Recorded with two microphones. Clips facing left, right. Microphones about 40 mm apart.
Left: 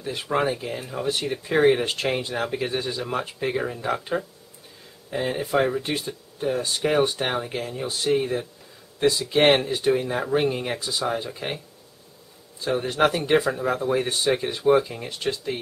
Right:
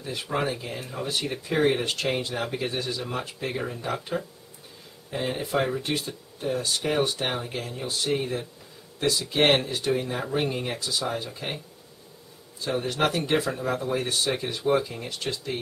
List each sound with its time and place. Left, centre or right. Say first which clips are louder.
0.0 s speech: left 4 dB; centre
13.0 s speech: left 5 dB; centre